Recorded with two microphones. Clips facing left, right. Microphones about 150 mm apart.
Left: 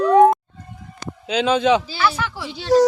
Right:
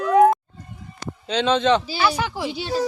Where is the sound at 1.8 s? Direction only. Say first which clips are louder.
Even; 15° right (ahead or behind).